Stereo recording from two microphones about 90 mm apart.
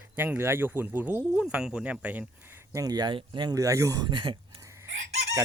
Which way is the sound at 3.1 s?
60° right (ahead or behind).